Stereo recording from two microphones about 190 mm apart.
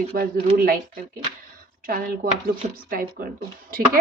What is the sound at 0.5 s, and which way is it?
Speech, 50° right (ahead or behind).